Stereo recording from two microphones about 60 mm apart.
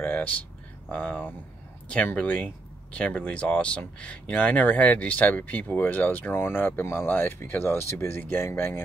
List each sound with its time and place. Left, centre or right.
0.0 s a sound: left
0.8 s speech: left
7.1 s speech: left